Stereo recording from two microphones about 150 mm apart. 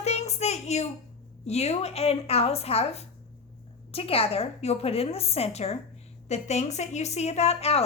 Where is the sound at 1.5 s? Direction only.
45° left (ahead or behind).